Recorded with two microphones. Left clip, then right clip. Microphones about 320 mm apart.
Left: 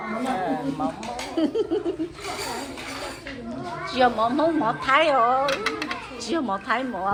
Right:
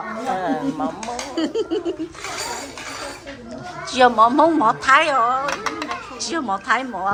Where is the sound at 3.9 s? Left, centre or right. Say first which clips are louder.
Right 7 dB; centre.